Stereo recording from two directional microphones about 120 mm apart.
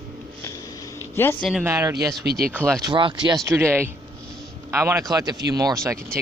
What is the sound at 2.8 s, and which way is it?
Speech, 40° right (ahead or behind).